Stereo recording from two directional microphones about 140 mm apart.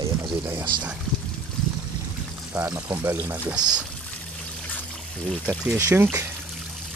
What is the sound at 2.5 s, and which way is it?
Speech, 10° right (ahead or behind).